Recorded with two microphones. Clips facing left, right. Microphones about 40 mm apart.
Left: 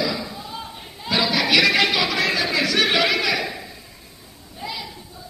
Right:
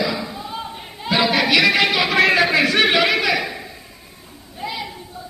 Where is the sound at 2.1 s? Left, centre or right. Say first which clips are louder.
Right 6 dB; right.